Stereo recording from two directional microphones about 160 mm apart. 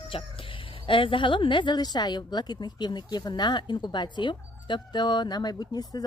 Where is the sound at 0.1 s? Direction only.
35° left (ahead or behind).